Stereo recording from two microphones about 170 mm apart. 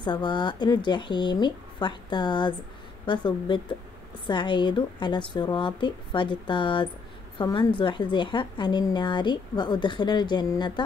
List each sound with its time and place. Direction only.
0.0 s a woman's voice: 25° left (ahead or behind)